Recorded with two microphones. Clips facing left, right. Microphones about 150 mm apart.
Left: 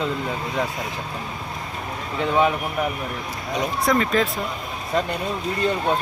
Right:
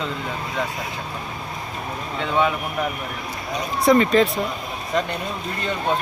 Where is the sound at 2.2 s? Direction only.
10° left (ahead or behind).